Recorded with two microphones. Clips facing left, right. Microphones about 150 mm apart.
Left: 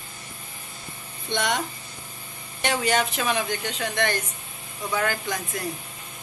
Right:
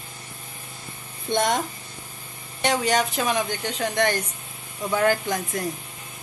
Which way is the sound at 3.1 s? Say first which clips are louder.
Right 1 dB; 35° right (ahead or behind).